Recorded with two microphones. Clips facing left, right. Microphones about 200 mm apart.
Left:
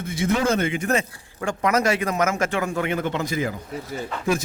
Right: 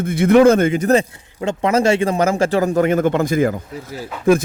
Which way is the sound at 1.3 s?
25° right (ahead or behind).